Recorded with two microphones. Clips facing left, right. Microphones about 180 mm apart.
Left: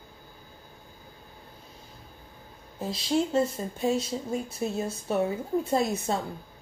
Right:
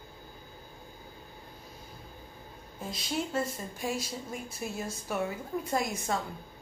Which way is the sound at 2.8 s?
30° left (ahead or behind).